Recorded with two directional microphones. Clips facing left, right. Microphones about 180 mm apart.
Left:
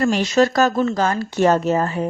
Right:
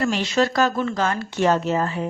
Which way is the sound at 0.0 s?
45° left (ahead or behind).